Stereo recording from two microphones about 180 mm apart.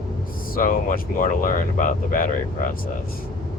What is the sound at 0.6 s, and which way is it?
Speech, 50° left (ahead or behind).